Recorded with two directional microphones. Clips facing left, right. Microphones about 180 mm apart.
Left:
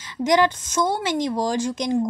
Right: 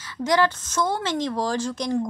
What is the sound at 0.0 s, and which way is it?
A woman's voice, 15° left (ahead or behind).